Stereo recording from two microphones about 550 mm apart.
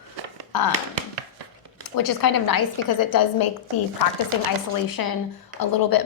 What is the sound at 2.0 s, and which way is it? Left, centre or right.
A woman's voice, left.